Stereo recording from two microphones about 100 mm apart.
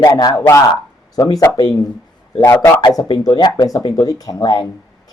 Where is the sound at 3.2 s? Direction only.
45° left (ahead or behind).